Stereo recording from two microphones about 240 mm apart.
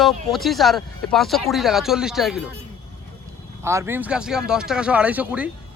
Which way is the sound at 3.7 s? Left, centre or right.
Centre.